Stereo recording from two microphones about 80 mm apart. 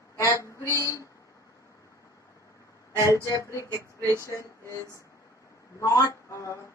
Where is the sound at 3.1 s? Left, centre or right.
Left.